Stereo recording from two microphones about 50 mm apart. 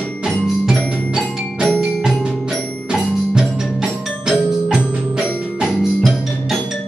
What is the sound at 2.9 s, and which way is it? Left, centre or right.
Music, centre.